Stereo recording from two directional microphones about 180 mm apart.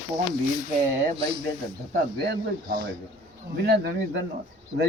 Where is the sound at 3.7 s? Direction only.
70° right (ahead or behind).